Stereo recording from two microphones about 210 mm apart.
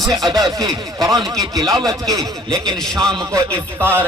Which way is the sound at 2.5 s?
5° left (ahead or behind).